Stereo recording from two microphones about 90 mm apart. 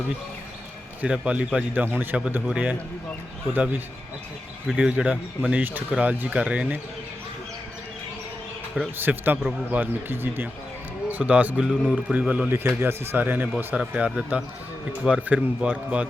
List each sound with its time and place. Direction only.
1.0 s a man's voice: 10° right (ahead or behind)
9.0 s a man's voice: 20° right (ahead or behind)
11.6 s a man's voice: 5° right (ahead or behind)
12.5 s a man's voice: 25° right (ahead or behind)